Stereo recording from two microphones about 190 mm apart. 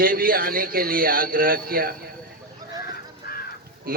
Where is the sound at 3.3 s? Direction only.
55° left (ahead or behind).